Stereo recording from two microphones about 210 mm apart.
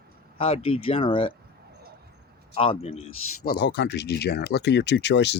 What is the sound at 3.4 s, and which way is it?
Speech, 50° left (ahead or behind).